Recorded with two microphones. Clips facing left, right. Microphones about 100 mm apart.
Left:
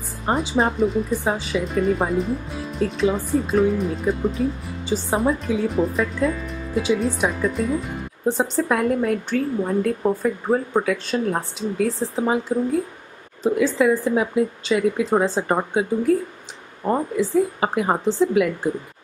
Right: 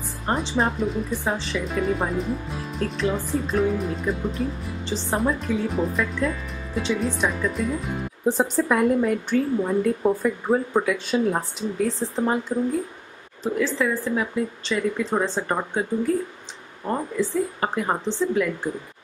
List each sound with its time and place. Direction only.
0.3 s speech: 5° left (ahead or behind)
17.9 s speech: 20° left (ahead or behind)
18.3 s speech: 10° left (ahead or behind)